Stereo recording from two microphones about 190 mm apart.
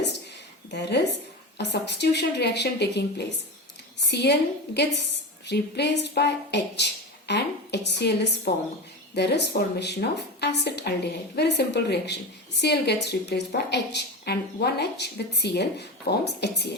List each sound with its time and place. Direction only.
0.7 s a woman's voice: 65° left (ahead or behind)